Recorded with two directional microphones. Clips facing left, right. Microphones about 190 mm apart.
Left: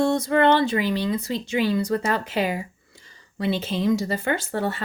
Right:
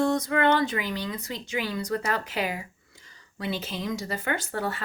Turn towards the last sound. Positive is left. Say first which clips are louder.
# left 4 dB
turn(degrees=25)  # may be behind; listen again after turning